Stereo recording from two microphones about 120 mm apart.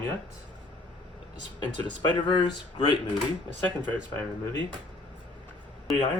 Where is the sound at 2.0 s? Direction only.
40° left (ahead or behind).